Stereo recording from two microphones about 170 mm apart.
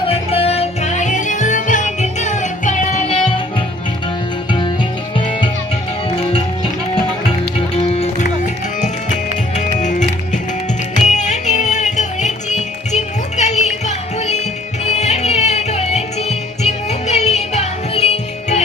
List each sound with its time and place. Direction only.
0.1 s music: 35° left (ahead or behind)
5.1 s music: 30° left (ahead or behind)
9.6 s music: 45° left (ahead or behind)